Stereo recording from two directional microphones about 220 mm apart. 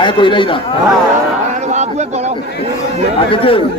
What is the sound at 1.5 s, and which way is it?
Speech, 30° right (ahead or behind).